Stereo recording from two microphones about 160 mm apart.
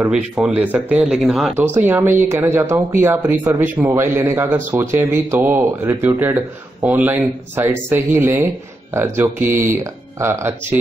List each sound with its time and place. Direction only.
0.1 s speech: 5° right (ahead or behind)
1.6 s speech: 10° right (ahead or behind)